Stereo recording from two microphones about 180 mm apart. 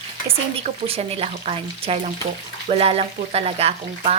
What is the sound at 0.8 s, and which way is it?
Speech, 35° right (ahead or behind).